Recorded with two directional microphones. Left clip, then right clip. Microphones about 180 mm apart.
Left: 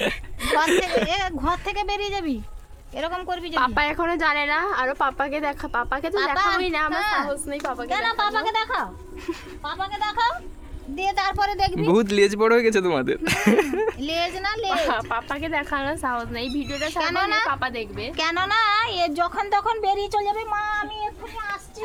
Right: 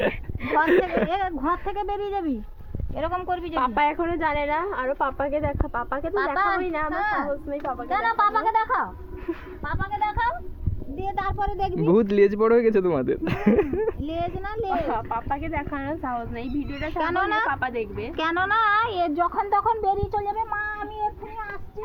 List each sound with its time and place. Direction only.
0.1 s a sound: 25° left (ahead or behind)
0.6 s a woman's voice: 5° left (ahead or behind)
3.6 s a woman's voice: 15° left (ahead or behind)
7.9 s a woman's voice: 15° left (ahead or behind)
10.0 s a woman's voice: centre (ahead or behind)
11.4 s speech: 40° left (ahead or behind)
11.9 s a woman's voice: 10° left (ahead or behind)
13.4 s speech: 25° left (ahead or behind)
14.0 s a woman's voice: 5° left (ahead or behind)
14.8 s speech: 25° left (ahead or behind)
17.0 s a woman's voice: centre (ahead or behind)
17.5 s speech: 25° left (ahead or behind)
18.2 s a woman's voice: 5° left (ahead or behind)
19.4 s speech: 25° left (ahead or behind)